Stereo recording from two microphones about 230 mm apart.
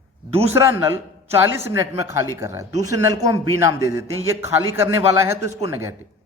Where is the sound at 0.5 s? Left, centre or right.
Centre.